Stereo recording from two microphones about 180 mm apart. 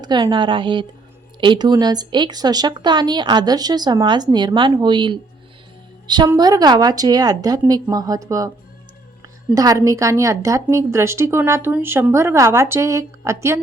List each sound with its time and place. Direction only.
0.0 s a woman's voice: 25° right (ahead or behind)